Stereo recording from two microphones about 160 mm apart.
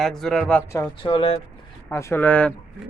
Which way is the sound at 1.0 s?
30° left (ahead or behind).